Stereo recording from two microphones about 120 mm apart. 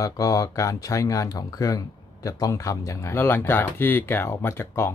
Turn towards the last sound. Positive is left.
turn(degrees=20)  # may be behind; listen again after turning